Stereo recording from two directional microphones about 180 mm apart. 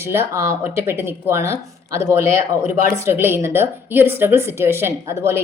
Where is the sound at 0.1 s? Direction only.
15° right (ahead or behind).